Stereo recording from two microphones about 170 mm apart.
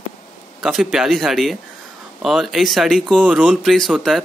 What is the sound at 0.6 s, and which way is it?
A man's voice, centre (ahead or behind).